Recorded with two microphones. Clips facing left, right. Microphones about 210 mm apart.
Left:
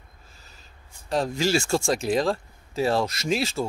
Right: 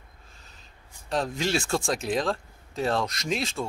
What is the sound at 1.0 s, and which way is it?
Speech, centre (ahead or behind).